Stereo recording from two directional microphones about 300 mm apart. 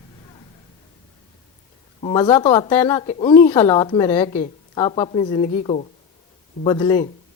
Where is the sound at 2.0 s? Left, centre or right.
Centre.